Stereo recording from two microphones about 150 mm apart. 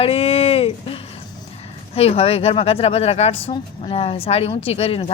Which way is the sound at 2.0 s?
40° left (ahead or behind).